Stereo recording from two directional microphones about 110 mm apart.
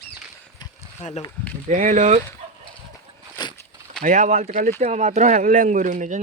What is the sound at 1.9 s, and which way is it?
Speech, 90° right.